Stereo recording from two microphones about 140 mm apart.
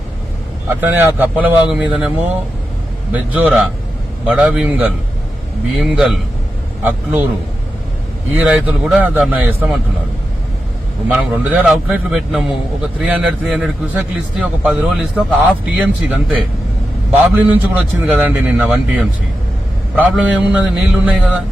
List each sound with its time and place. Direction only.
0.8 s a man's voice: 15° right (ahead or behind)
6.8 s a man's voice: 15° right (ahead or behind)
8.4 s a man's voice: 10° right (ahead or behind)
11.1 s a man's voice: 10° right (ahead or behind)
20.5 s a man's voice: 10° right (ahead or behind)